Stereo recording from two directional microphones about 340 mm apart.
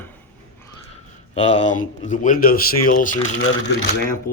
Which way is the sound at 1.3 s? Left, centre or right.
Centre.